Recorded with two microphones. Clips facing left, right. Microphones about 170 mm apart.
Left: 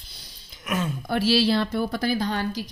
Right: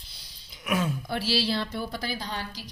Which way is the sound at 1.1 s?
55° left (ahead or behind).